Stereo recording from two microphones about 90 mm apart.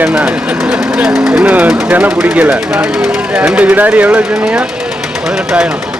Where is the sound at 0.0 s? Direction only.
15° right (ahead or behind).